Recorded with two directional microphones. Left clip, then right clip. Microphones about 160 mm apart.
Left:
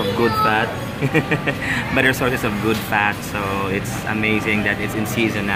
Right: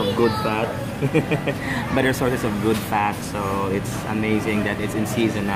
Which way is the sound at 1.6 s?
20° right (ahead or behind).